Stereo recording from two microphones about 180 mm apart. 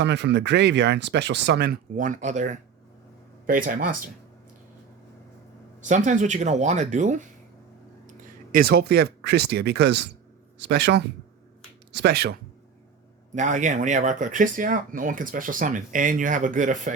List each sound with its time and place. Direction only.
0.0 s speech: 75° right (ahead or behind); by 4.1 s 50° right (ahead or behind)
5.8 s speech: 40° right (ahead or behind)
8.5 s speech: 60° right (ahead or behind)
13.3 s speech: 45° right (ahead or behind)